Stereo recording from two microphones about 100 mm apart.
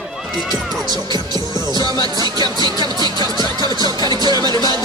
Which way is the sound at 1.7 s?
45° right (ahead or behind).